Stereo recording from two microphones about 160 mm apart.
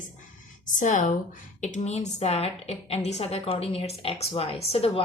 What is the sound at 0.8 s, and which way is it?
A woman's voice, 55° left (ahead or behind).